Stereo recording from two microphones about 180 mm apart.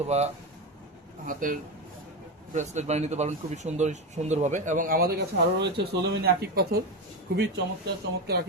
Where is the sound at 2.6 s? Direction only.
40° right (ahead or behind); by 6.7 s 60° right (ahead or behind).